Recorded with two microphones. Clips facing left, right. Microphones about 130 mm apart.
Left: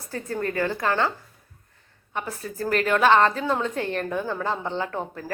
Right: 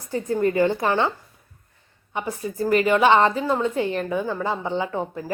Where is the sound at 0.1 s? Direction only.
15° right (ahead or behind).